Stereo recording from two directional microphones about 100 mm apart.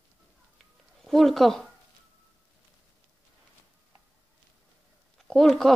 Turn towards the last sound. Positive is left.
turn(degrees=0)  # may be behind; listen again after turning